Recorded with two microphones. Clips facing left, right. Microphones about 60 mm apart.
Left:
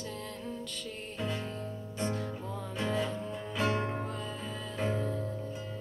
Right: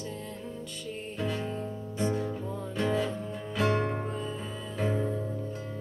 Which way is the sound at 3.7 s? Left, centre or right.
Right.